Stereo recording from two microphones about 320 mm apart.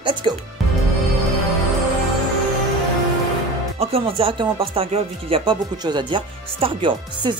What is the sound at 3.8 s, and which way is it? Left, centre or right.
Speech, centre.